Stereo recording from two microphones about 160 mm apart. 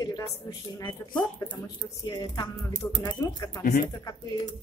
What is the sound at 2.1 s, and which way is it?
Speech, 25° left (ahead or behind).